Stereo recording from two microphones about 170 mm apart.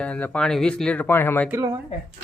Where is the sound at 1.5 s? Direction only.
20° right (ahead or behind).